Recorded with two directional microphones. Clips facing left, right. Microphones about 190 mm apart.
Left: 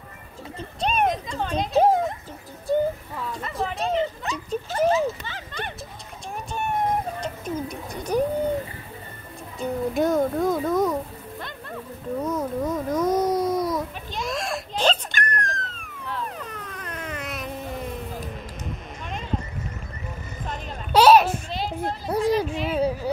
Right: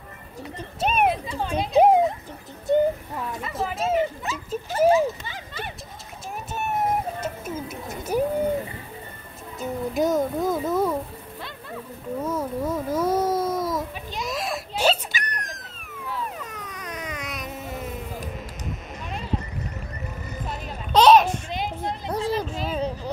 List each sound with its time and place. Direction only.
0.6 s speech: 5° right (ahead or behind)
2.7 s speech: 20° right (ahead or behind)
3.3 s speech: 5° right (ahead or behind)
6.5 s bird: 5° right (ahead or behind)
9.6 s music: centre (ahead or behind)
12.3 s baby cry: 5° right (ahead or behind)
20.9 s a sound: 5° left (ahead or behind)
21.5 s a sound: 15° right (ahead or behind)
22.1 s a sound: 10° left (ahead or behind)